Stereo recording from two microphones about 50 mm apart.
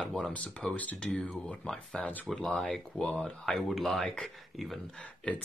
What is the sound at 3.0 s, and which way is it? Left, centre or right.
Speech, centre.